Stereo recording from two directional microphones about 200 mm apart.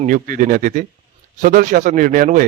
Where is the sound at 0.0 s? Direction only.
40° right (ahead or behind).